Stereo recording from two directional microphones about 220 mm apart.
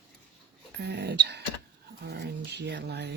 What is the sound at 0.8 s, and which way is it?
Speech, 50° right (ahead or behind).